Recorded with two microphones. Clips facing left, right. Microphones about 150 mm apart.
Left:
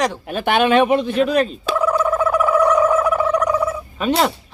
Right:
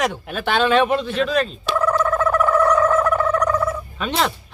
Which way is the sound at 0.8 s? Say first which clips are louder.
Left 3 dB; 10° left (ahead or behind).